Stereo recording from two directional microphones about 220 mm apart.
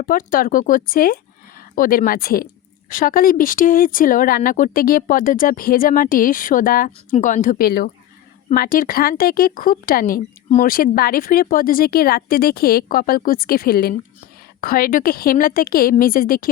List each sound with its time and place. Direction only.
0.0 s speech: 40° left (ahead or behind)